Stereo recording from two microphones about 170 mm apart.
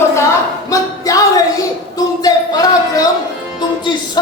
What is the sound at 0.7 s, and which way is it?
Music, 20° left (ahead or behind).